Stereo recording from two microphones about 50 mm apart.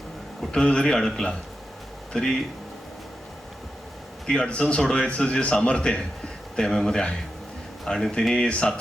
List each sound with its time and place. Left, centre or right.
0.5 s a man's voice: centre
4.3 s a man's voice: centre